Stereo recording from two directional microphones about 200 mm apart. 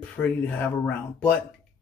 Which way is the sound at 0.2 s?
10° left (ahead or behind).